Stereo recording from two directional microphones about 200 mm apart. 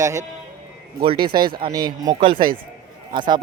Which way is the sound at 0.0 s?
15° right (ahead or behind).